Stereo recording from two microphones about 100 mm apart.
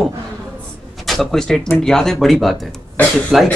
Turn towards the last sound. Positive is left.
turn(degrees=-5)  # may be behind; listen again after turning